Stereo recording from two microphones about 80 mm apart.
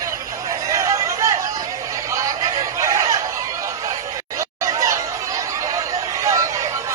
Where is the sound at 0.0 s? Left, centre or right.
Right.